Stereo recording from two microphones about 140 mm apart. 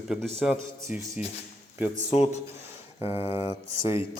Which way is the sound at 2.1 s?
50° left (ahead or behind).